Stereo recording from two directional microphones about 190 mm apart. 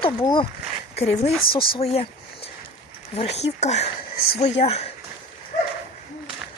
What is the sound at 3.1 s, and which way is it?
Speech, 35° left (ahead or behind).